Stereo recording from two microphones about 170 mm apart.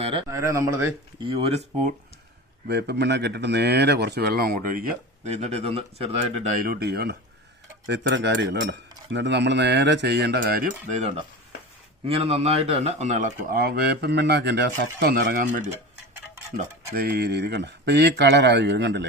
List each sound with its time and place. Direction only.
0.0 s speech: 30° right (ahead or behind)
0.3 s speech: 15° right (ahead or behind)
1.2 s speech: 35° right (ahead or behind)
2.6 s speech: 75° right (ahead or behind); by 4.9 s 60° right (ahead or behind)
5.2 s speech: 40° right (ahead or behind)
6.5 s speech: 55° right (ahead or behind)
7.9 s speech: 90° right; by 10.7 s 65° right (ahead or behind)
12.0 s speech: 35° right (ahead or behind); by 15.6 s 60° right (ahead or behind)
16.9 s speech: 65° right (ahead or behind); by 19.0 s 90° right